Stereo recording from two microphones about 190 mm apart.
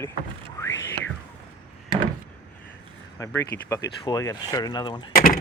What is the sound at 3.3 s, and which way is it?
Speech, 15° left (ahead or behind).